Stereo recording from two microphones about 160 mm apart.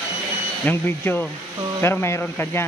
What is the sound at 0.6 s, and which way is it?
Speech, 10° left (ahead or behind).